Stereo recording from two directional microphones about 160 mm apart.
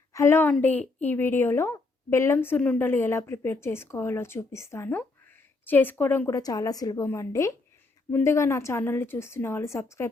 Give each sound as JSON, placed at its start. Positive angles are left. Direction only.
{"t": 0.1, "sound": "a woman's voice", "side_deg": 15}